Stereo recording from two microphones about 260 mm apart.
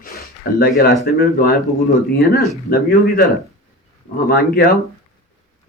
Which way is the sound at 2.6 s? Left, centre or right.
Left.